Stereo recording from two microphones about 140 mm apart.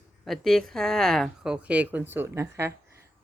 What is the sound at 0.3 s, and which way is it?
Speech, 5° left (ahead or behind).